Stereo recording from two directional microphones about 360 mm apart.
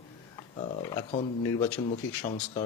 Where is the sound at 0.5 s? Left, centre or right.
Centre.